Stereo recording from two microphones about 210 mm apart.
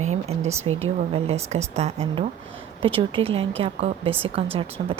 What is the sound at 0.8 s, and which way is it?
A woman's voice, 30° right (ahead or behind).